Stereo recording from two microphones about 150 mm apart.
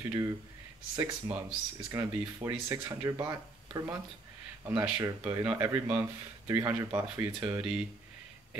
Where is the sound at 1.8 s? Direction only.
20° right (ahead or behind).